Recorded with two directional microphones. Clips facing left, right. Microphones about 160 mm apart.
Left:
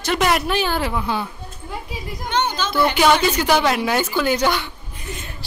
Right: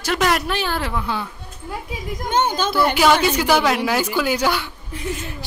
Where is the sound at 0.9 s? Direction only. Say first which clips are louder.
Left 1 dB; 15° left (ahead or behind).